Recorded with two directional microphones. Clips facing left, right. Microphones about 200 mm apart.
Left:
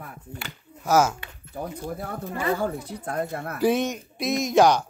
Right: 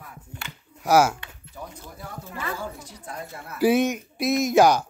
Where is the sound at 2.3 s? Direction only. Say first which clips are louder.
Left 8 dB; 40° left (ahead or behind).